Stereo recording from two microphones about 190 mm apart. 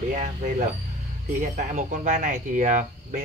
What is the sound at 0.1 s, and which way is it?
Speech, 40° right (ahead or behind).